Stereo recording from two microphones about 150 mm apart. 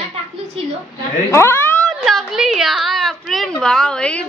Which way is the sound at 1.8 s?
5° left (ahead or behind).